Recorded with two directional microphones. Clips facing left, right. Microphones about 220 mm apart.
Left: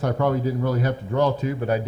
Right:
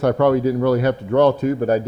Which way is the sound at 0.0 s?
70° right (ahead or behind).